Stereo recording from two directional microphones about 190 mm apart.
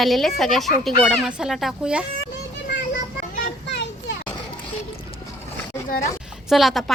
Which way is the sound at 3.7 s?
65° left (ahead or behind).